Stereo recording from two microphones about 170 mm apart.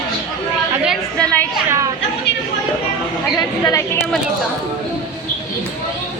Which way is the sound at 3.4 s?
20° left (ahead or behind).